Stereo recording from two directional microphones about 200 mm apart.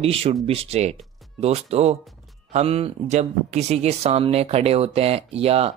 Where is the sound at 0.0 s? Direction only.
30° right (ahead or behind).